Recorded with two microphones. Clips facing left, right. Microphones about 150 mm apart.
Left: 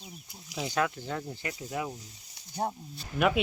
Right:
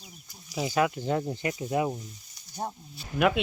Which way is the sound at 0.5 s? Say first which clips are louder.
Right 4 dB; 10° right (ahead or behind).